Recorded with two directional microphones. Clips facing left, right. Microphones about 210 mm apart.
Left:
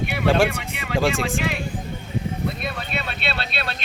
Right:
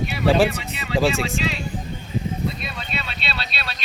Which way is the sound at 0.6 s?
50° left (ahead or behind).